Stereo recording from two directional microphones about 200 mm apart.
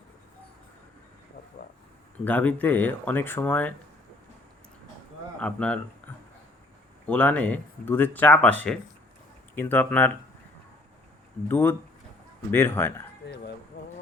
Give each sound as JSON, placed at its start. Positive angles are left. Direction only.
{"t": 2.2, "sound": "speech", "side_deg": 10}
{"t": 5.4, "sound": "speech", "side_deg": 5}
{"t": 6.0, "sound": "a sound", "side_deg": 5}
{"t": 7.1, "sound": "speech", "side_deg": 5}
{"t": 11.4, "sound": "speech", "side_deg": 10}
{"t": 13.2, "sound": "a sound", "side_deg": 55}